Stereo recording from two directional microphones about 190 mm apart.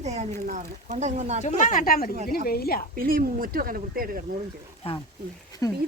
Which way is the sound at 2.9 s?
50° right (ahead or behind).